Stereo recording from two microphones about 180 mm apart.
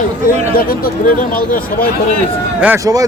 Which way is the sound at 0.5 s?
55° left (ahead or behind).